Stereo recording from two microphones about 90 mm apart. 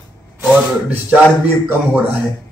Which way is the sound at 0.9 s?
25° right (ahead or behind).